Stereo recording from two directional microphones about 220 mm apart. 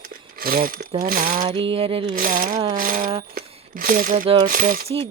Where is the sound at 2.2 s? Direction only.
40° right (ahead or behind).